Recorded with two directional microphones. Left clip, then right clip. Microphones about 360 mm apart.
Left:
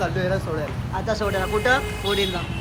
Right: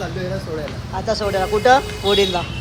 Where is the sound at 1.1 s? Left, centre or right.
Centre.